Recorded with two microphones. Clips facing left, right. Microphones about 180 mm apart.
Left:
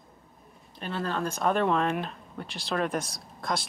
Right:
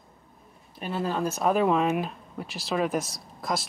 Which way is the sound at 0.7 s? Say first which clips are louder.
Right 3 dB; 5° right (ahead or behind).